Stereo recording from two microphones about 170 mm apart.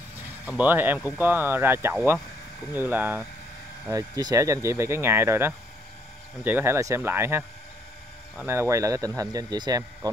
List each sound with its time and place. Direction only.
0.6 s speech: 10° right (ahead or behind)
3.9 s speech: 20° right (ahead or behind)
8.5 s speech: 15° right (ahead or behind)